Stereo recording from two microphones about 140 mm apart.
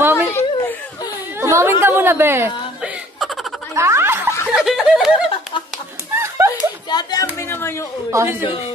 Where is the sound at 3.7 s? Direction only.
20° right (ahead or behind).